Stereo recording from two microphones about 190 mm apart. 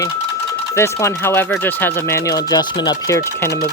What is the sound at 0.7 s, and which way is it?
Speech, 15° left (ahead or behind).